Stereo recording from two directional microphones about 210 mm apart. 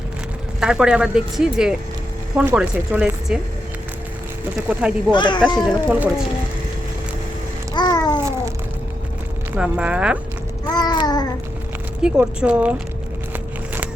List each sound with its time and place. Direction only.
0.6 s speech: 5° right (ahead or behind)
4.7 s speech: 5° right (ahead or behind)
5.1 s speech: 20° left (ahead or behind)
5.5 s speech: 5° right (ahead or behind)
7.7 s babbling: 20° left (ahead or behind)
9.5 s speech: 5° right (ahead or behind)
10.7 s babbling: 20° left (ahead or behind)
12.0 s speech: 5° right (ahead or behind)